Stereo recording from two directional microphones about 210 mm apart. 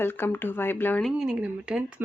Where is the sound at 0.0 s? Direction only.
10° left (ahead or behind).